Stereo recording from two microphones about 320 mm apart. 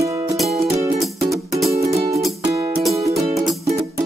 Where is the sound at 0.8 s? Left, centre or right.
Centre.